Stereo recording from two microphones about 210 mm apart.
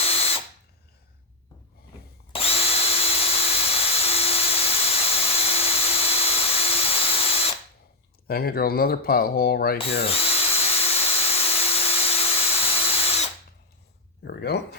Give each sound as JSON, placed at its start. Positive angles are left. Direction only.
{"t": 0.0, "sound": "drill", "side_deg": 30}
{"t": 2.3, "sound": "drill", "side_deg": 30}
{"t": 8.3, "sound": "speech", "side_deg": 45}
{"t": 10.0, "sound": "drill", "side_deg": 30}
{"t": 14.3, "sound": "speech", "side_deg": 50}